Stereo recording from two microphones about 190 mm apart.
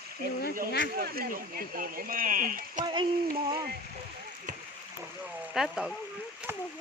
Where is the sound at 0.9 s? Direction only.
50° right (ahead or behind).